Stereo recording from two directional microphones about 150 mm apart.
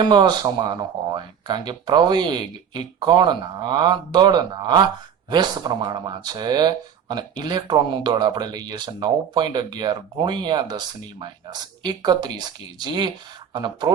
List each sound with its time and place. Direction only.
0.0 s speech: 30° right (ahead or behind)